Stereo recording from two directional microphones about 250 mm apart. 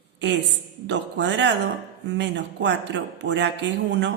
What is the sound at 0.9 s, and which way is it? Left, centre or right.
Speech, right.